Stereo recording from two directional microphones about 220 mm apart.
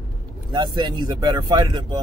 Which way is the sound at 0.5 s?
20° right (ahead or behind).